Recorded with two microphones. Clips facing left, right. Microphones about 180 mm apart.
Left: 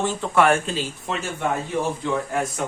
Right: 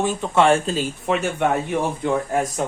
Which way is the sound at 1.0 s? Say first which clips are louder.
Right 7 dB; 60° right (ahead or behind).